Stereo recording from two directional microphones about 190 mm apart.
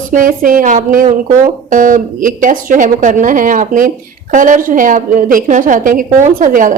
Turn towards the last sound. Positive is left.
turn(degrees=-45)  # may be behind; listen again after turning